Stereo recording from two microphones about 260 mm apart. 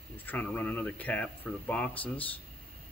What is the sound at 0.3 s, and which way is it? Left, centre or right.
Speech, centre.